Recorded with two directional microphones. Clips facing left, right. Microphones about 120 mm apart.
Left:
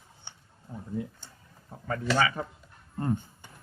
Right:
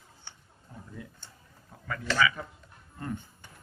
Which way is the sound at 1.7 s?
35° left (ahead or behind).